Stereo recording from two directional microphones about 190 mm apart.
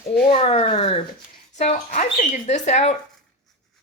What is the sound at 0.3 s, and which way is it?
Speech, 30° left (ahead or behind).